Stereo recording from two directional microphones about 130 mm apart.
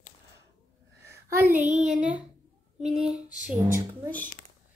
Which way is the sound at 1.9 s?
10° right (ahead or behind).